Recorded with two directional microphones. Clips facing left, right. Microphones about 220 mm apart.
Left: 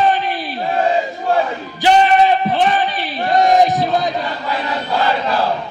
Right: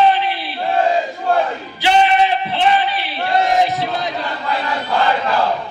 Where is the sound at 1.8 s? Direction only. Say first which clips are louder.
Left 2 dB; 35° left (ahead or behind).